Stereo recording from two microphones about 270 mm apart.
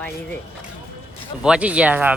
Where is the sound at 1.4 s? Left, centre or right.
Centre.